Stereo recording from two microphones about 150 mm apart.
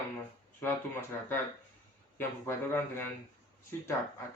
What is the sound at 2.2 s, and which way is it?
Speech, 15° left (ahead or behind).